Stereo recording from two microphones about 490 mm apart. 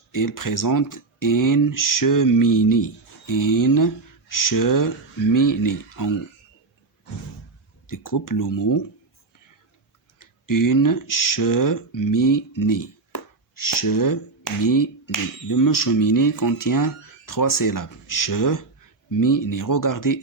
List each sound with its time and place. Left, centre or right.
0.1 s speech: left
7.9 s speech: left
10.2 s speech: left